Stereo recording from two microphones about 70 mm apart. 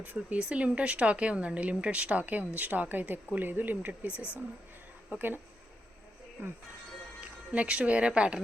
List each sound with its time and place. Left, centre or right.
0.0 s speech: right
7.2 s speech: centre